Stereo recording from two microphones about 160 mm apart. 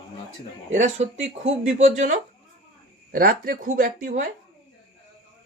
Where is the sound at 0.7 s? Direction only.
45° right (ahead or behind).